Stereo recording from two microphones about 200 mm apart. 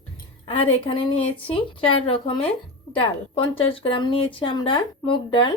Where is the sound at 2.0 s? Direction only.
25° left (ahead or behind).